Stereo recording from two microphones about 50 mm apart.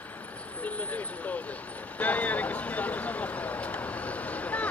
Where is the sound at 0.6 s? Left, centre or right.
Left.